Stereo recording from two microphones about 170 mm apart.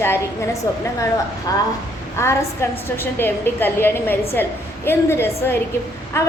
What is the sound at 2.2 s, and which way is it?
A woman's voice, 15° left (ahead or behind).